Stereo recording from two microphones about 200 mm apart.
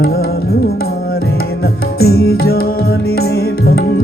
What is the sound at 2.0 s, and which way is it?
Music, 50° left (ahead or behind).